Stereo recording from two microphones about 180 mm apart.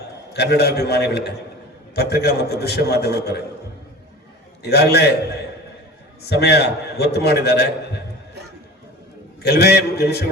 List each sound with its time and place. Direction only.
0.3 s a man's voice: 65° left (ahead or behind)
4.6 s a man's voice: 65° left (ahead or behind)
6.2 s a man's voice: 65° left (ahead or behind)
9.4 s a man's voice: 65° left (ahead or behind)